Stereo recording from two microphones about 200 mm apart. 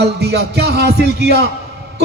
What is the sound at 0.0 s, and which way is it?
A man's voice, 55° right (ahead or behind).